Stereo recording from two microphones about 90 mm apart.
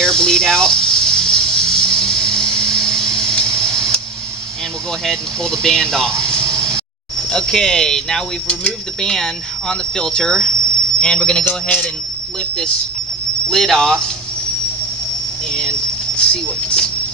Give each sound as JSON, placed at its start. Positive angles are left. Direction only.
{"t": 0.0, "sound": "a sound", "side_deg": 5}
{"t": 5.0, "sound": "speech", "side_deg": 5}
{"t": 13.5, "sound": "speech", "side_deg": 5}
{"t": 16.2, "sound": "speech", "side_deg": 10}